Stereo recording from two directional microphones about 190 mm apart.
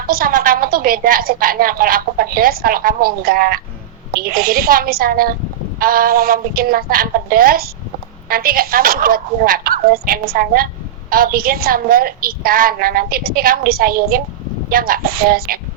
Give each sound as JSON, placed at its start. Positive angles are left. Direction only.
{"t": 0.1, "sound": "a woman's voice", "side_deg": -50}